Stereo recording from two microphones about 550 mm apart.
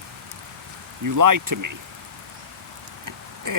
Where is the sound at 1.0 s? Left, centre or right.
Right.